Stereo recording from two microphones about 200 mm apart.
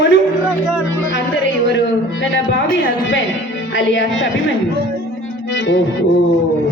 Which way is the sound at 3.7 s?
65° left (ahead or behind).